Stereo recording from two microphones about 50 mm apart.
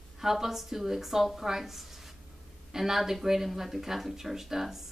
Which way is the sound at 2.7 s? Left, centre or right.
Centre.